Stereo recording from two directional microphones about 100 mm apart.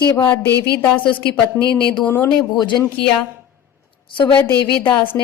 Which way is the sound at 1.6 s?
30° left (ahead or behind).